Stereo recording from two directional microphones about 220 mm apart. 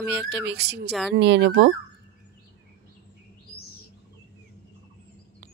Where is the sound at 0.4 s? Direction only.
50° right (ahead or behind).